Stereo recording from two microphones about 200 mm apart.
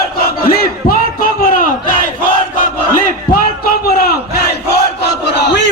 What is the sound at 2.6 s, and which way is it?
Battle cry, 45° left (ahead or behind).